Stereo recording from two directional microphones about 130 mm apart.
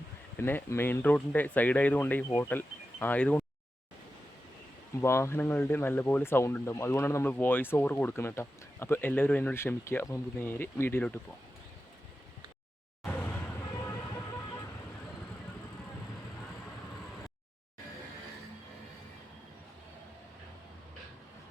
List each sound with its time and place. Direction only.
0.3 s speech: 15° left (ahead or behind)
4.9 s speech: 20° left (ahead or behind)
13.1 s vehicle: 15° left (ahead or behind)